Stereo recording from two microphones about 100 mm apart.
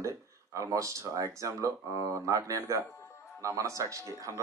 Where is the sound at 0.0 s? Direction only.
35° right (ahead or behind).